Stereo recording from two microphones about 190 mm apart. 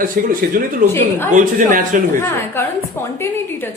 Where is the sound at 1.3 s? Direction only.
45° right (ahead or behind).